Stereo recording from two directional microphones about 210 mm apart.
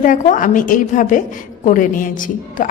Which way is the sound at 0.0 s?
40° left (ahead or behind).